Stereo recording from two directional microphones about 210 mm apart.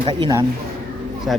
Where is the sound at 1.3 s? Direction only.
Centre (ahead or behind).